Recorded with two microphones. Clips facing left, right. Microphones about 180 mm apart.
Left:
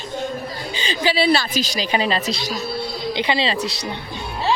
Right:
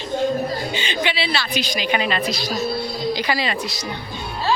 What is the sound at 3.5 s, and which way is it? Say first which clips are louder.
Speech: left 2 dB; 70° left (ahead or behind).